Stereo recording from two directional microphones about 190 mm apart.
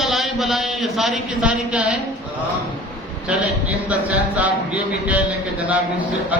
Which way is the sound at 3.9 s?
10° right (ahead or behind).